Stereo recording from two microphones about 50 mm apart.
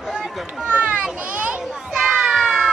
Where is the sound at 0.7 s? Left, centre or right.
Right.